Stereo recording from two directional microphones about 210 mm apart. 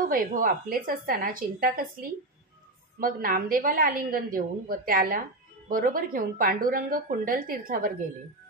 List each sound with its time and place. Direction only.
0.1 s a woman's voice: 40° right (ahead or behind)